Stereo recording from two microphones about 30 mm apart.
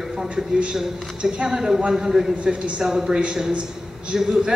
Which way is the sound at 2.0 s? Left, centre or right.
Centre.